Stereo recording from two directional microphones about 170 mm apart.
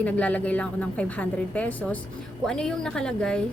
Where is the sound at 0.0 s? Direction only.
10° left (ahead or behind).